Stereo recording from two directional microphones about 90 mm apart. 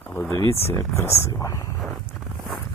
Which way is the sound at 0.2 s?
30° left (ahead or behind).